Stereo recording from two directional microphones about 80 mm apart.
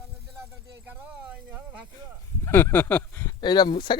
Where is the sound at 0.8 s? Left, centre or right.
Centre.